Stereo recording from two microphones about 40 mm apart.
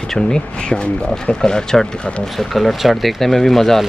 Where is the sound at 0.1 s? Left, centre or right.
Centre.